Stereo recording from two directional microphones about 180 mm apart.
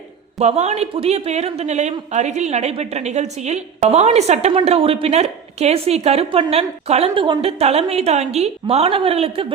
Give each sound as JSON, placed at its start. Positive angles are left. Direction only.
{"t": 0.3, "sound": "speech", "side_deg": -40}